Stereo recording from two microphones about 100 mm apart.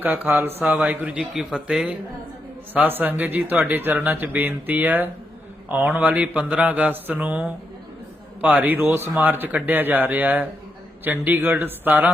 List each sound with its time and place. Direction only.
0.0 s a man's voice: 15° right (ahead or behind)
2.7 s speech: 20° right (ahead or behind)